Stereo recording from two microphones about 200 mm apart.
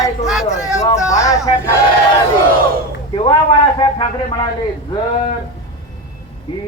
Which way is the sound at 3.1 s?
25° left (ahead or behind).